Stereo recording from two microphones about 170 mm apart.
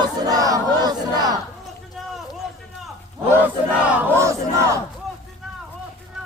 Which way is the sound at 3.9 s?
15° right (ahead or behind).